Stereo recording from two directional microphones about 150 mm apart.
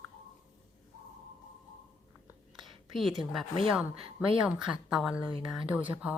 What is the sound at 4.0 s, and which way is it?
Speech, 35° right (ahead or behind).